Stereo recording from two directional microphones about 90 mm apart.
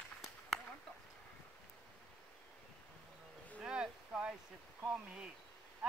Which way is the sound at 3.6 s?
10° right (ahead or behind).